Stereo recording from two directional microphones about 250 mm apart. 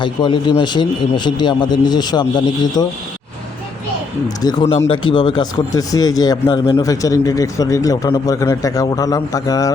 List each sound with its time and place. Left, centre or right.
0.0 s speech: centre
4.4 s speech: centre